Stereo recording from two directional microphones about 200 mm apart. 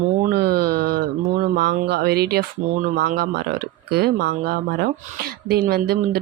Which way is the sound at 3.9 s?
55° right (ahead or behind).